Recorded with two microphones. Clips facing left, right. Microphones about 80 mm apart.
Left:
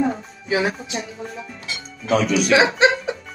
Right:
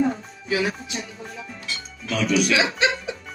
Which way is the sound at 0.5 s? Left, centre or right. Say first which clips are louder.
Left 3 dB; left.